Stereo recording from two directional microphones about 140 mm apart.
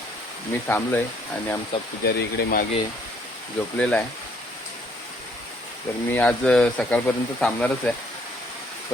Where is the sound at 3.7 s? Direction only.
10° left (ahead or behind).